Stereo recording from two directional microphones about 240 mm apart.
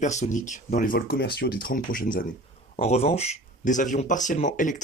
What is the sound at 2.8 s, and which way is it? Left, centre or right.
Speech, left.